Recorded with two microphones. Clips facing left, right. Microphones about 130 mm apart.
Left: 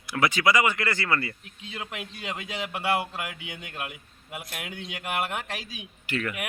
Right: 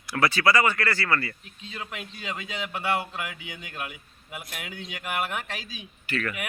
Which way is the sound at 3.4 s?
60° left (ahead or behind).